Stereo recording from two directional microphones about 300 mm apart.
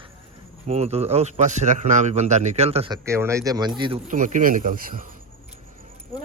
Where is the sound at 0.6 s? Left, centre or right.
Right.